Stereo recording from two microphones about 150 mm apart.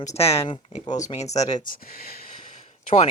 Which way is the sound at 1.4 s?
55° left (ahead or behind).